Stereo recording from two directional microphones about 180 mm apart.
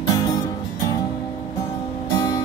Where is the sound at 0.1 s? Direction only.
20° left (ahead or behind).